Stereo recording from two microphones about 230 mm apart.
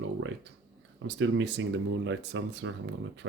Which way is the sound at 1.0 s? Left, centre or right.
Right.